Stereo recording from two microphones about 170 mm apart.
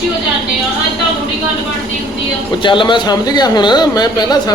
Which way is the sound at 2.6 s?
30° left (ahead or behind).